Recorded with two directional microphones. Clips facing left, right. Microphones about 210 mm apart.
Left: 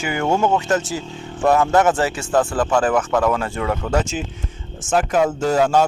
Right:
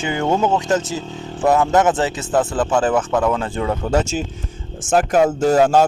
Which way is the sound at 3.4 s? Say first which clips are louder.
Right 1 dB; 25° right (ahead or behind).